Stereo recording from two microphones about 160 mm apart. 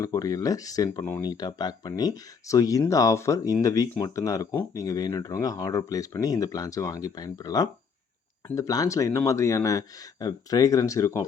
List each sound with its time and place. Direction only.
0.0 s speech: 20° left (ahead or behind)